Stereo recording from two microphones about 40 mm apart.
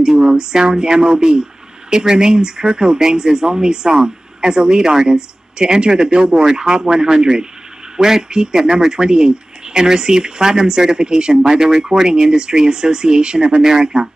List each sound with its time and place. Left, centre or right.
0.2 s speech: centre